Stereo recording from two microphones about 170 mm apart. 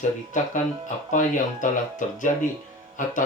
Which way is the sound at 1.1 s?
50° left (ahead or behind).